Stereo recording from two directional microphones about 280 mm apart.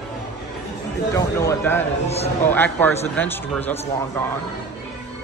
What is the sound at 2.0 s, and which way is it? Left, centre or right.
Speech, left.